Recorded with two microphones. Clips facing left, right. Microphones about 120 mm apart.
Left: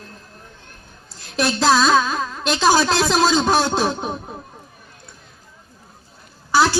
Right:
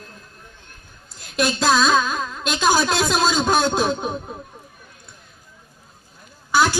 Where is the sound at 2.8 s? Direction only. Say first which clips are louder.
Left 2 dB; 15° right (ahead or behind).